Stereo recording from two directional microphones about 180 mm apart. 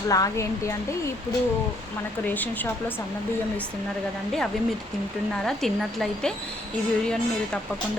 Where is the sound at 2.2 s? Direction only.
10° left (ahead or behind).